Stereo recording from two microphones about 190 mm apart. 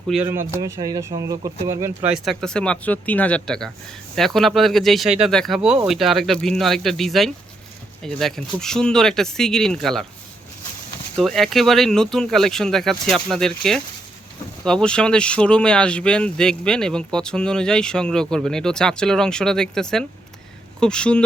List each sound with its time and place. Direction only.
0.1 s speech: centre (ahead or behind)
0.6 s speech: 20° right (ahead or behind)
2.1 s speech: centre (ahead or behind)
11.2 s speech: centre (ahead or behind)